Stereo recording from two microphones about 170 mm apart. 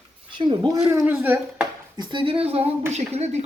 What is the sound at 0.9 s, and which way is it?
Speech, 10° right (ahead or behind).